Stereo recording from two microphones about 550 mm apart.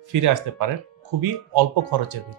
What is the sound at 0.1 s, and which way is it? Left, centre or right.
Speech, right.